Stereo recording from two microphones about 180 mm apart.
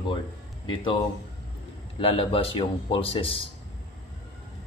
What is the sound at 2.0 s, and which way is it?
A man's voice, 30° left (ahead or behind).